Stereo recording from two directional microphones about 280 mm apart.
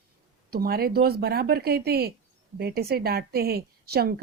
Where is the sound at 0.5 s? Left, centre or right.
Right.